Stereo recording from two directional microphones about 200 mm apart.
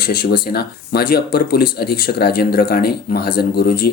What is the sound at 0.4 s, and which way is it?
Speech, 50° left (ahead or behind).